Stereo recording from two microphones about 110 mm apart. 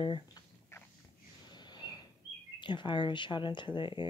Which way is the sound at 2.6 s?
45° left (ahead or behind).